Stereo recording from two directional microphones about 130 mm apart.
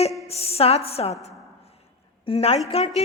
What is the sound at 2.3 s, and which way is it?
Speech, 50° left (ahead or behind).